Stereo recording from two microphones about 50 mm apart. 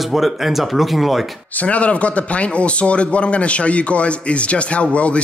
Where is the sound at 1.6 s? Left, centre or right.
Left.